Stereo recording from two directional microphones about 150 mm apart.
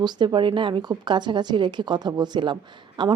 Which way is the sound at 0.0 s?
30° right (ahead or behind).